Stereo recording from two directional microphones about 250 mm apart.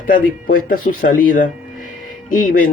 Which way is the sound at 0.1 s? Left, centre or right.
Left.